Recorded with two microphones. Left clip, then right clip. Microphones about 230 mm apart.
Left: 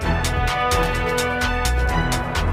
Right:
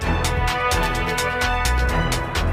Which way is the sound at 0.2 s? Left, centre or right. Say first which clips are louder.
Even; centre.